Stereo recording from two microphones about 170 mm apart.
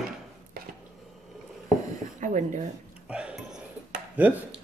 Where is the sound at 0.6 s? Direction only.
60° right (ahead or behind).